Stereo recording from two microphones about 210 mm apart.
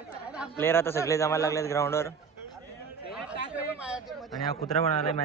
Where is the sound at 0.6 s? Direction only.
10° left (ahead or behind).